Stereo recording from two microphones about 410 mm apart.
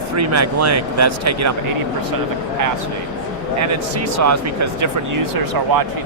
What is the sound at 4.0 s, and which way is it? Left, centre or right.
Speech, right.